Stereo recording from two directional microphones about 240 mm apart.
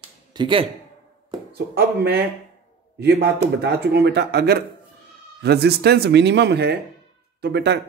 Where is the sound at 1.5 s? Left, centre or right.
Right.